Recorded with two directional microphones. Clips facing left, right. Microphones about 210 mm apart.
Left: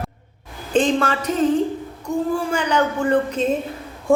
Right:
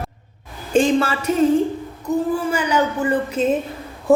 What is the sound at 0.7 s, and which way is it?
A woman's voice, 10° right (ahead or behind).